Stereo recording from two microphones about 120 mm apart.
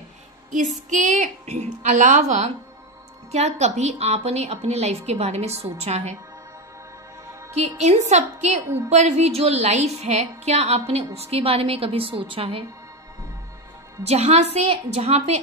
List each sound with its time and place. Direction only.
0.5 s a woman's voice: 90° right; by 6.1 s 65° right (ahead or behind)
7.5 s a woman's voice: 65° right (ahead or behind); by 12.6 s 50° right (ahead or behind)
14.0 s a woman's voice: 65° right (ahead or behind)